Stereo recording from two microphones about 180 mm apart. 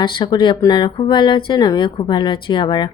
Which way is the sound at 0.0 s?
25° left (ahead or behind).